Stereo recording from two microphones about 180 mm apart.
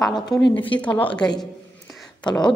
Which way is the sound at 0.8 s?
10° left (ahead or behind).